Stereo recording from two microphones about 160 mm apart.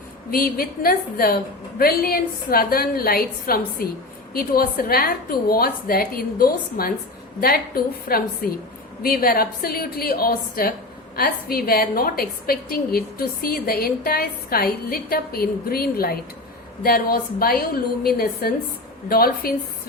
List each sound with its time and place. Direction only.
0.3 s a woman's voice: 65° left (ahead or behind)